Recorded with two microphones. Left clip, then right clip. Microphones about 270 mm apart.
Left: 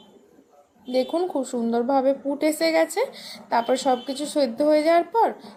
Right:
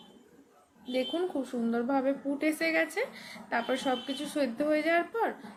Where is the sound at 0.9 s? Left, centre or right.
Centre.